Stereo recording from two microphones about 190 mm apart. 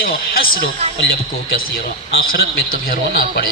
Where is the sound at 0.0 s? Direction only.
50° left (ahead or behind).